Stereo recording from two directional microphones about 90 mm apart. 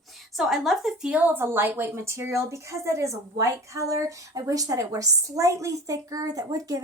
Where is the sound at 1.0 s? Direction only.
15° right (ahead or behind).